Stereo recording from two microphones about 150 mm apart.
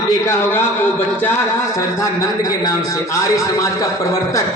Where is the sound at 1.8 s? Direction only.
20° left (ahead or behind).